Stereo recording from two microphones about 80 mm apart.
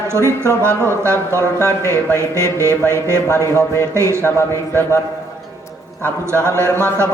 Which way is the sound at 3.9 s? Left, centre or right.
Right.